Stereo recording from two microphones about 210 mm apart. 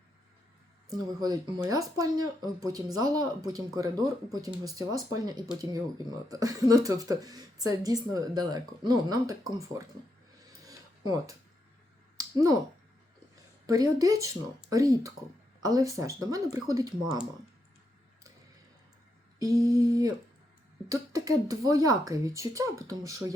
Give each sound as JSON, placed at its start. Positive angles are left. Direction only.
{"t": 0.9, "sound": "speech", "side_deg": -20}
{"t": 10.6, "sound": "filing", "side_deg": -15}
{"t": 12.1, "sound": "a sound", "side_deg": -15}
{"t": 13.7, "sound": "speech", "side_deg": -15}
{"t": 19.4, "sound": "speech", "side_deg": -15}